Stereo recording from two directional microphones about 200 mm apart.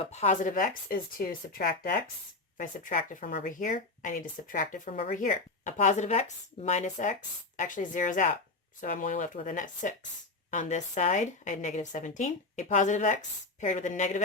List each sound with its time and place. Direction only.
0.0 s speech: 35° left (ahead or behind)